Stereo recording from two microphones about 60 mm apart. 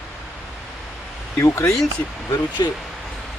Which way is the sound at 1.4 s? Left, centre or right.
Left.